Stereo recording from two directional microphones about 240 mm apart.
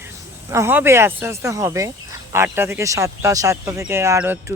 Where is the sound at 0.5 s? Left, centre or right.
Centre.